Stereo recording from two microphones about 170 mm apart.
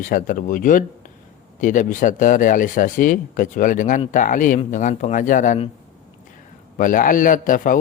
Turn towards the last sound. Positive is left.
turn(degrees=55)  # may be behind; listen again after turning